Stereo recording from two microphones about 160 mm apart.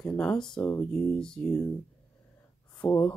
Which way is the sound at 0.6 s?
15° left (ahead or behind).